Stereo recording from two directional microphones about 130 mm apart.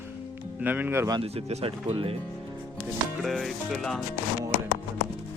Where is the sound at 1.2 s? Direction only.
50° right (ahead or behind).